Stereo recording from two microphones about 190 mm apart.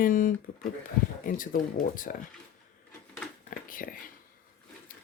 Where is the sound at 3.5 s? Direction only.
45° left (ahead or behind).